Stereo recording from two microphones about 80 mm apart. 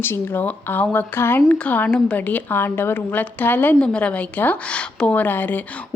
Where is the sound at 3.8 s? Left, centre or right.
Centre.